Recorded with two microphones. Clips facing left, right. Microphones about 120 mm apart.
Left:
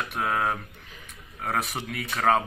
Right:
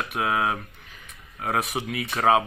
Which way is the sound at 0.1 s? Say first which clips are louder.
Right 2 dB; 5° right (ahead or behind).